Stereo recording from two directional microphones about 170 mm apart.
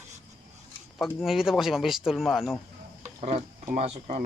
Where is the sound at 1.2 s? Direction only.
Centre (ahead or behind).